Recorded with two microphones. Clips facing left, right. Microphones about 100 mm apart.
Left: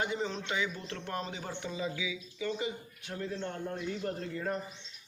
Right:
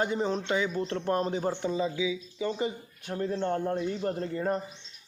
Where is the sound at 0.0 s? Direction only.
40° right (ahead or behind).